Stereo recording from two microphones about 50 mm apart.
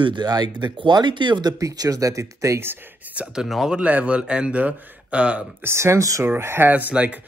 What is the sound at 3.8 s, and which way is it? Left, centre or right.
Speech, right.